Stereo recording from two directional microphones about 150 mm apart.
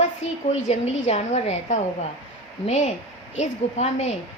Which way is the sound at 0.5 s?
50° left (ahead or behind).